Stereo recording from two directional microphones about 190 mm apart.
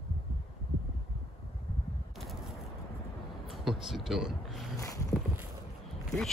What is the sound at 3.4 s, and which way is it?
Speech, centre (ahead or behind).